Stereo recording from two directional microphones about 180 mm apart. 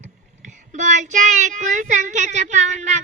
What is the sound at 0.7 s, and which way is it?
A child's voice, 40° right (ahead or behind).